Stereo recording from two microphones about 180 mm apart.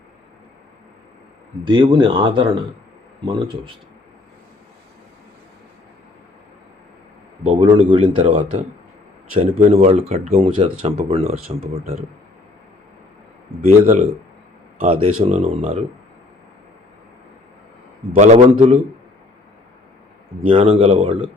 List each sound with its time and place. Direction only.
1.6 s speech: 25° right (ahead or behind)
7.4 s speech: 35° right (ahead or behind)
13.7 s speech: 40° right (ahead or behind)
18.1 s speech: 35° right (ahead or behind)
20.5 s speech: 30° right (ahead or behind)